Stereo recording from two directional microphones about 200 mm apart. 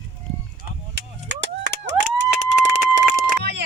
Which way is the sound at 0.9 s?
60° right (ahead or behind).